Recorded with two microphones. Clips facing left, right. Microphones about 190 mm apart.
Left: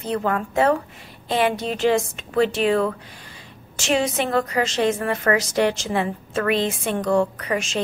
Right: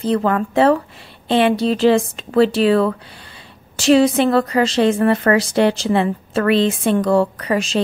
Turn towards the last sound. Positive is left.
turn(degrees=-35)  # may be behind; listen again after turning